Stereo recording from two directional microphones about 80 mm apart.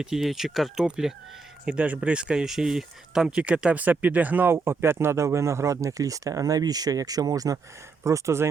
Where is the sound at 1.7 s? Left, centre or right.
Centre.